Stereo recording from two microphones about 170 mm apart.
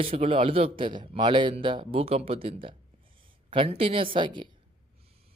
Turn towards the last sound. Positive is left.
turn(degrees=-30)  # may be behind; listen again after turning